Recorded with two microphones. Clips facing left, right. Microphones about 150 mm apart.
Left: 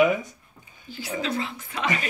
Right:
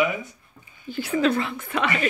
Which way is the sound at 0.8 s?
60° right (ahead or behind).